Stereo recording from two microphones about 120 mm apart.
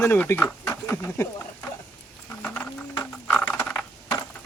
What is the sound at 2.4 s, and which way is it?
Clip-clop, 15° left (ahead or behind).